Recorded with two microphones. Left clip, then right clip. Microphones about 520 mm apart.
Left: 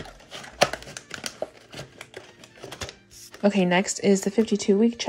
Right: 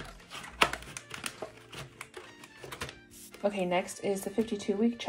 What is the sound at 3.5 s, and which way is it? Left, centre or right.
Speech, centre.